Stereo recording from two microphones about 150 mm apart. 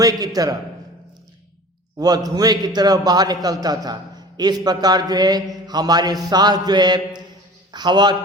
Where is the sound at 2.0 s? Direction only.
25° right (ahead or behind).